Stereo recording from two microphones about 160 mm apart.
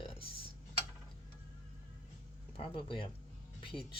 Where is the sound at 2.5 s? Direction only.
35° left (ahead or behind).